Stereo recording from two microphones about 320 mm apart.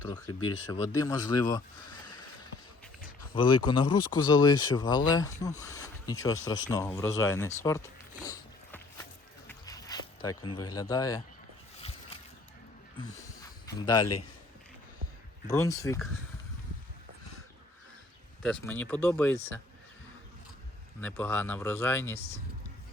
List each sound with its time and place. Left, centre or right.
0.0 s speech: centre
3.3 s speech: centre
8.2 s a sound: centre
10.8 s speech: centre
11.8 s a sound: centre
13.0 s speech: centre
15.4 s speech: centre
18.4 s speech: centre
21.0 s speech: centre